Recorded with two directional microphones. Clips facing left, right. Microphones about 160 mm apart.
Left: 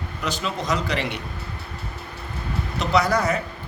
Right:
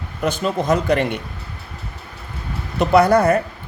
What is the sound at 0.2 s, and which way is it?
Speech, 50° right (ahead or behind).